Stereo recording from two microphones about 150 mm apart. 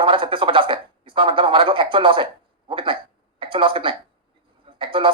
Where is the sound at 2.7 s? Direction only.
35° right (ahead or behind).